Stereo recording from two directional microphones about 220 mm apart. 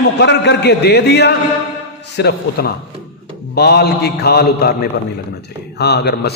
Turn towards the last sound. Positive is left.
turn(degrees=45)  # may be behind; listen again after turning